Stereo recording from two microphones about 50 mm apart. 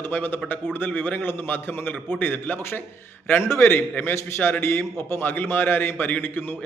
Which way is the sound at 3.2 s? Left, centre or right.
Left.